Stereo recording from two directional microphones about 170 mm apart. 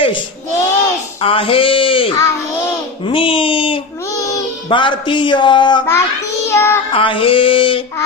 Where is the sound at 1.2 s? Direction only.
35° left (ahead or behind).